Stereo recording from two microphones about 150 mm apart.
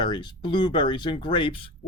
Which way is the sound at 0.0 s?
30° left (ahead or behind).